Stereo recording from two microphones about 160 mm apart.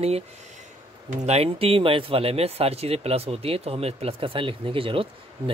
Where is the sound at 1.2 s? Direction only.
40° right (ahead or behind).